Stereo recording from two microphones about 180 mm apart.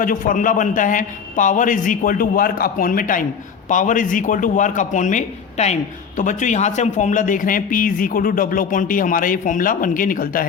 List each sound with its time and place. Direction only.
0.0 s a man's voice: 50° left (ahead or behind)